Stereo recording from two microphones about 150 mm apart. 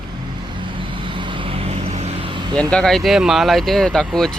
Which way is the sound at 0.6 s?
35° right (ahead or behind).